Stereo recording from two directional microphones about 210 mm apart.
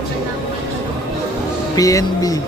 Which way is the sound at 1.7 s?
15° left (ahead or behind).